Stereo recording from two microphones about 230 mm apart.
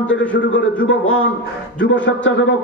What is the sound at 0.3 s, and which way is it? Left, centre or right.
A man's voice, left.